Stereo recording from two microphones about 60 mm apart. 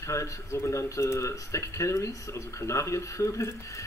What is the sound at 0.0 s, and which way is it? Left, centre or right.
Speech, left.